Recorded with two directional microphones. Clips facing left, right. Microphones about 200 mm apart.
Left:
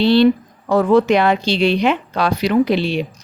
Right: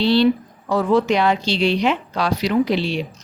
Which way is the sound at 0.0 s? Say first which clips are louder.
Left 3 dB; 55° left (ahead or behind).